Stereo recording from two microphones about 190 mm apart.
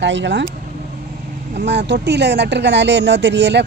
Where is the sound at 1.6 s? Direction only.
65° right (ahead or behind).